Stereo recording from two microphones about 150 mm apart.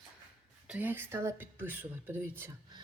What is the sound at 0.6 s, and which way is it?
Speech, 10° right (ahead or behind).